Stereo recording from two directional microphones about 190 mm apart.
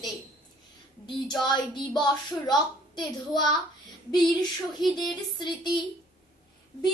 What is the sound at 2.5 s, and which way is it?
Child singing, 20° left (ahead or behind).